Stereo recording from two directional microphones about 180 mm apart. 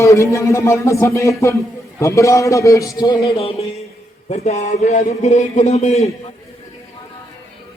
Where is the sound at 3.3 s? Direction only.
35° left (ahead or behind).